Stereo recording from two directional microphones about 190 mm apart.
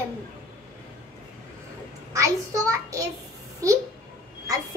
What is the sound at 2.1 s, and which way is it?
Speech, 15° right (ahead or behind).